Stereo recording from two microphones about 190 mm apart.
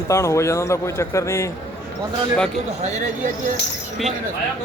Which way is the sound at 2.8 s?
35° right (ahead or behind).